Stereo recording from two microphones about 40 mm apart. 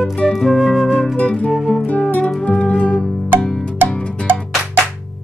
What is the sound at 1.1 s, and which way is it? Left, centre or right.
Music, left.